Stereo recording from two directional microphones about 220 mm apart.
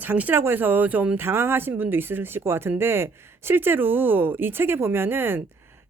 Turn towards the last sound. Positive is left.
turn(degrees=-10)  # may be behind; listen again after turning